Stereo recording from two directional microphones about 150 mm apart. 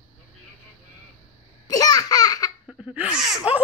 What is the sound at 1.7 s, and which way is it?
Laughter, 25° left (ahead or behind).